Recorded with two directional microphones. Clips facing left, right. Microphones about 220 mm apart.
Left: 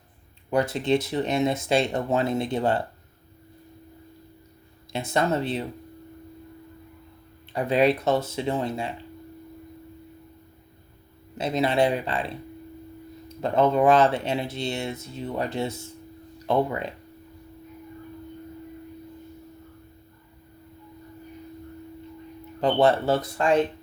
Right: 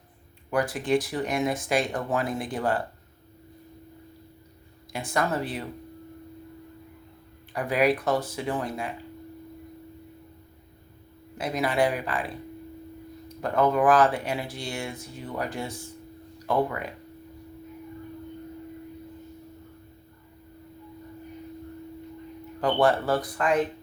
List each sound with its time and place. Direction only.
0.5 s speech: 25° left (ahead or behind)
4.9 s speech: 25° left (ahead or behind)
7.5 s speech: 25° left (ahead or behind)
11.3 s speech: 25° left (ahead or behind)
22.6 s speech: 25° left (ahead or behind)